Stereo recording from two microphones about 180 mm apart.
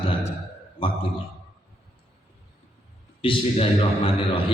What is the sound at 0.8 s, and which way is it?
Speech, 30° left (ahead or behind).